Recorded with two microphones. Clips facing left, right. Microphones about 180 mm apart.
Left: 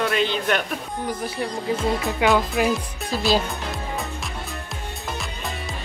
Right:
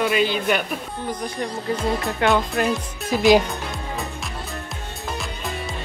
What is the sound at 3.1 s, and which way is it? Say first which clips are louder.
Speech: right 6 dB; 15° right (ahead or behind).